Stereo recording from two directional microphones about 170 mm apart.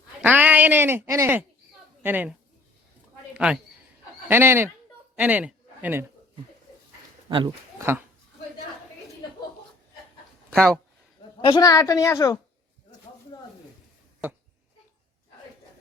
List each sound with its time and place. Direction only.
0.2 s speech: 10° right (ahead or behind)
3.3 s a woman's voice: 5° right (ahead or behind)
7.3 s speech: 25° right (ahead or behind)
11.4 s a woman's voice: 25° left (ahead or behind)